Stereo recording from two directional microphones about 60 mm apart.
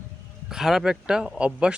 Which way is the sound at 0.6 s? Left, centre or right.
Centre.